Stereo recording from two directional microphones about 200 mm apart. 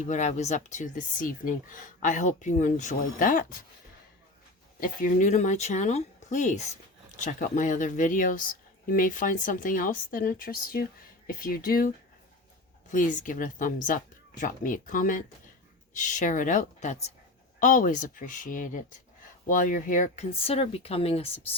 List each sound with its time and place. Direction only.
0.0 s speech: 35° left (ahead or behind)
4.8 s speech: 40° left (ahead or behind)
12.9 s speech: 40° left (ahead or behind)